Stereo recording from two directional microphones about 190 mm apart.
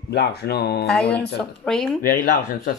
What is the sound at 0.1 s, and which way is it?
Speech, 60° left (ahead or behind).